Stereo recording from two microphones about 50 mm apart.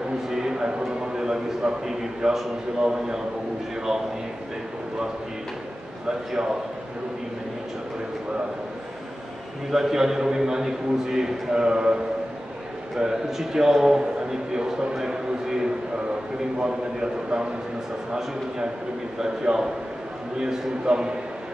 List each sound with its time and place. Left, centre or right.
0.3 s a sound: centre
6.0 s a man's voice: centre
9.7 s a man's voice: centre
14.5 s a sound: centre
16.5 s a man's voice: centre
19.1 s a man's voice: centre